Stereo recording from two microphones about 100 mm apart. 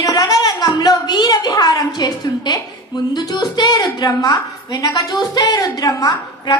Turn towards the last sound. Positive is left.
turn(degrees=40)  # may be behind; listen again after turning